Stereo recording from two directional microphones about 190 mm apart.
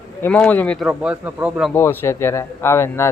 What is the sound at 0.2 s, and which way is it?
Speech, 10° left (ahead or behind).